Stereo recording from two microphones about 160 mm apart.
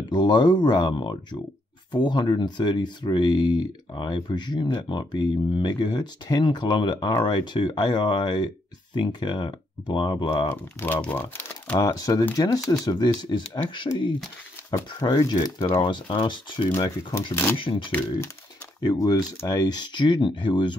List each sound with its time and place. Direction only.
0.1 s speech: 25° left (ahead or behind)
10.5 s speech: 10° left (ahead or behind); by 20.7 s 30° left (ahead or behind)